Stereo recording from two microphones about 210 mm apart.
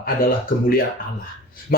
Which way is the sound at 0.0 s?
45° left (ahead or behind).